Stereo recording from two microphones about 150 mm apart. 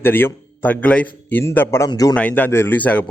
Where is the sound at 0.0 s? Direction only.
15° left (ahead or behind).